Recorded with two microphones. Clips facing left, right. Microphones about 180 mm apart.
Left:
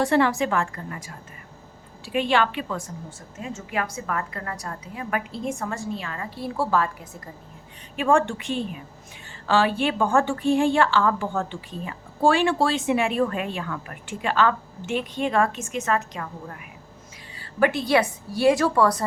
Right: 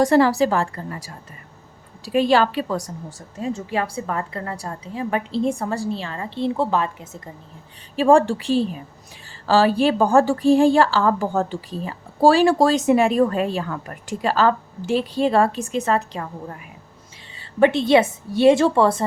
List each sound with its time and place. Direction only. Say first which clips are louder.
0.0 s a woman's voice: right 5 dB; 40° right (ahead or behind); by 7.2 s 25° right (ahead or behind)
7.9 s a woman's voice: right 6 dB; 35° right (ahead or behind)
17.6 s a woman's voice: right 5 dB; 25° right (ahead or behind)